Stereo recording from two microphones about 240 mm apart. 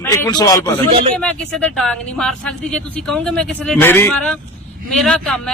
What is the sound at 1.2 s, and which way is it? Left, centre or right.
Speech, centre.